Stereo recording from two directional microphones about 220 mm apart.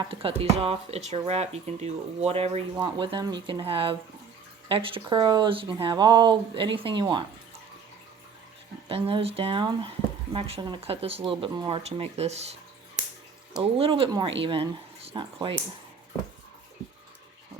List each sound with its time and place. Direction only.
0.1 s speech: 25° right (ahead or behind)
8.9 s speech: 25° right (ahead or behind)
13.6 s speech: 25° right (ahead or behind)